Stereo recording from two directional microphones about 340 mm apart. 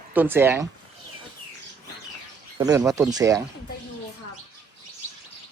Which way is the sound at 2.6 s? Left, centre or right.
Centre.